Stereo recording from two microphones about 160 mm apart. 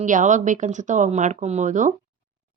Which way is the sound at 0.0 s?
50° right (ahead or behind).